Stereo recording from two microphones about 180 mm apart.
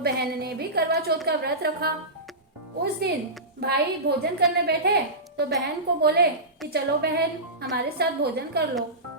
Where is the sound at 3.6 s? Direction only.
60° right (ahead or behind).